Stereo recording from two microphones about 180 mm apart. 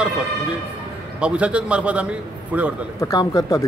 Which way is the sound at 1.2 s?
5° right (ahead or behind).